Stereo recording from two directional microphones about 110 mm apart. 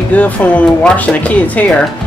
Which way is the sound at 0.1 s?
15° left (ahead or behind).